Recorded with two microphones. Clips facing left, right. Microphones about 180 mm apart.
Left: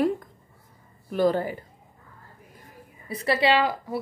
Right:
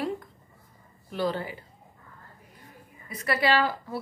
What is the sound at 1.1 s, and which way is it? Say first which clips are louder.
Speech: left 7 dB; 45° left (ahead or behind).